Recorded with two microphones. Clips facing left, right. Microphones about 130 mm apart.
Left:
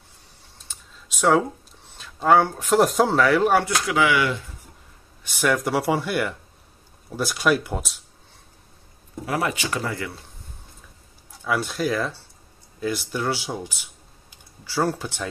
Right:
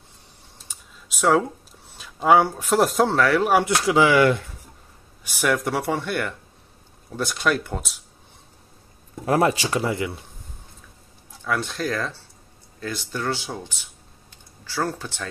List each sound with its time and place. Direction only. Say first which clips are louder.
0.7 s computer keyboard: left 1 dB; centre (ahead or behind)
2.0 s speech: right 1 dB; 5° right (ahead or behind)
3.6 s speech: right 3 dB; 25° right (ahead or behind)
4.1 s speech: right 5 dB; 45° right (ahead or behind)
5.2 s speech: even; centre (ahead or behind)
9.2 s speech: right 6 dB; 40° right (ahead or behind)
9.8 s speech: right 4 dB; 20° right (ahead or behind)
11.4 s speech: left 2 dB; 5° left (ahead or behind)